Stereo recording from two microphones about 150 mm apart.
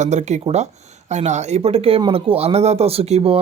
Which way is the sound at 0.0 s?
50° right (ahead or behind).